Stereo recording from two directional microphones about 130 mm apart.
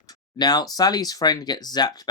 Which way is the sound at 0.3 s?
30° left (ahead or behind).